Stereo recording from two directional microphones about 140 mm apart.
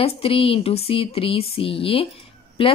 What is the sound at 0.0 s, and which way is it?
Speech, 45° left (ahead or behind).